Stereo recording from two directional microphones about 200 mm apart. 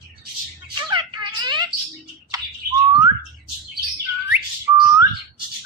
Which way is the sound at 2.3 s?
20° right (ahead or behind).